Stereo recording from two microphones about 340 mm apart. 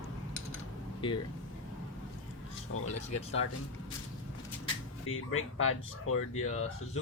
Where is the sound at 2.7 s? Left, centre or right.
Left.